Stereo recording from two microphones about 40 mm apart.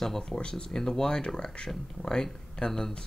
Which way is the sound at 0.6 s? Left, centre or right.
Centre.